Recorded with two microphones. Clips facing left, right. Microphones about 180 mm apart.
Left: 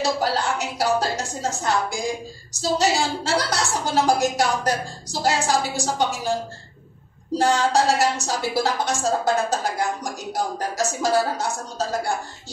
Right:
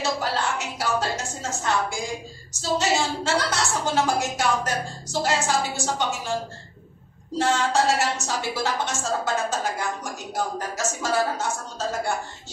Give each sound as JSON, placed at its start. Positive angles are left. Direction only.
{"t": 0.0, "sound": "a woman's voice", "side_deg": 35}
{"t": 7.3, "sound": "a woman's voice", "side_deg": 35}